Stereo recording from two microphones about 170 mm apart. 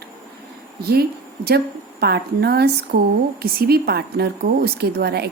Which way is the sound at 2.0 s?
70° right (ahead or behind).